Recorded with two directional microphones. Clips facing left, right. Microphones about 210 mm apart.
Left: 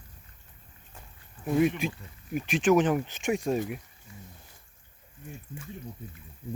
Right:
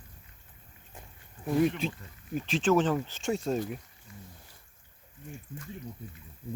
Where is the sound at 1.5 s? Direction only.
5° left (ahead or behind).